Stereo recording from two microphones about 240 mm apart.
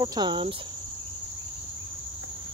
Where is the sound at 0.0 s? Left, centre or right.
Centre.